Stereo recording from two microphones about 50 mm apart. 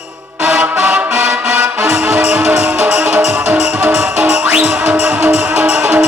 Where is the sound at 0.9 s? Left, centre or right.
Centre.